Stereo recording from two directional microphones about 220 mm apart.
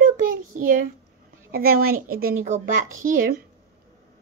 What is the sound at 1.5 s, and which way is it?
Speech, 45° right (ahead or behind).